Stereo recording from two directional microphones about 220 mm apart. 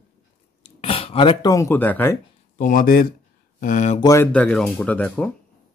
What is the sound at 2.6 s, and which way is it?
Speech, 40° left (ahead or behind).